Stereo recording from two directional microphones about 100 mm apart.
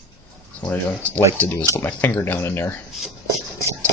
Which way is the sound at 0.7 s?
20° left (ahead or behind).